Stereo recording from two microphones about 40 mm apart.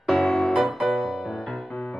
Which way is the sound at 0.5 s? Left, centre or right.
Centre.